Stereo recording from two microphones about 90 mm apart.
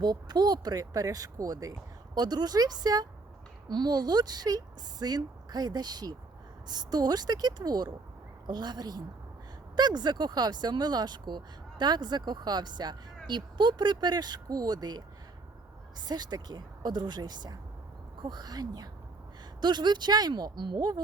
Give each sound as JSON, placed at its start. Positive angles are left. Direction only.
{"t": 0.0, "sound": "speech", "side_deg": -50}